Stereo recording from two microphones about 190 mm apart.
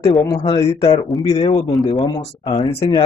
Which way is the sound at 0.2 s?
20° left (ahead or behind).